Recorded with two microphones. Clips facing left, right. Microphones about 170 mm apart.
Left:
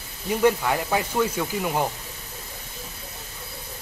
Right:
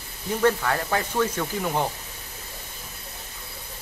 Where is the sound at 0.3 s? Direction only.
10° left (ahead or behind).